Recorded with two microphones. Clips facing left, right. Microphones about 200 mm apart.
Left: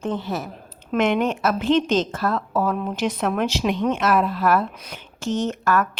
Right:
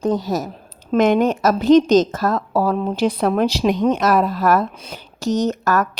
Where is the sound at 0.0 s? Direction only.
40° right (ahead or behind).